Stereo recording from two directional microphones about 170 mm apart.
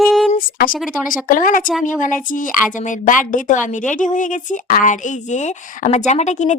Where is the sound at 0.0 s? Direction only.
Centre (ahead or behind).